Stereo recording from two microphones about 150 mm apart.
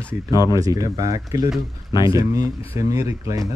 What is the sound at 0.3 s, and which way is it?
Speech, 25° left (ahead or behind).